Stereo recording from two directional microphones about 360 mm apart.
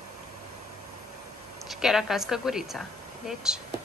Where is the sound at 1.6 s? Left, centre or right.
Centre.